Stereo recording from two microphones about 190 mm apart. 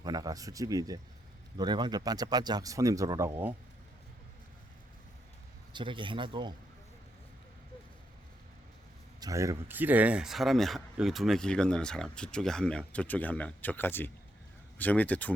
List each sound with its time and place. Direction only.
0.0 s speech: 20° right (ahead or behind)
5.7 s speech: 25° right (ahead or behind)
9.2 s speech: 15° right (ahead or behind); by 15.4 s 10° left (ahead or behind)